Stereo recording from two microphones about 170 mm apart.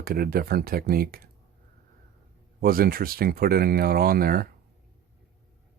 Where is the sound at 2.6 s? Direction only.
60° right (ahead or behind).